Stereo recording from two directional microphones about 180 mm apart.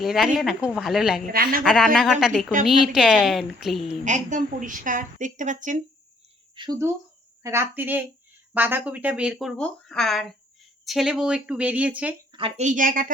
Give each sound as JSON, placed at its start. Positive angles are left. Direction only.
{"t": 0.0, "sound": "speech", "side_deg": 0}
{"t": 1.3, "sound": "a woman's voice", "side_deg": -55}
{"t": 1.6, "sound": "speech", "side_deg": 0}
{"t": 4.0, "sound": "a woman's voice", "side_deg": -45}
{"t": 6.6, "sound": "speech", "side_deg": -20}
{"t": 12.3, "sound": "a woman's voice", "side_deg": -30}